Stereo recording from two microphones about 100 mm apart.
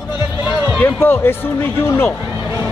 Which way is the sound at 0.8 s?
20° left (ahead or behind).